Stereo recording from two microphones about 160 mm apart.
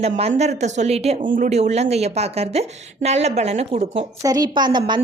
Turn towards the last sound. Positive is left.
turn(degrees=-30)  # may be behind; listen again after turning